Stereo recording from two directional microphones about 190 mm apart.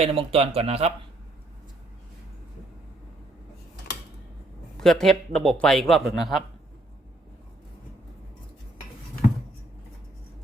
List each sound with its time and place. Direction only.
0.0 s speech: 30° right (ahead or behind)
4.8 s speech: centre (ahead or behind)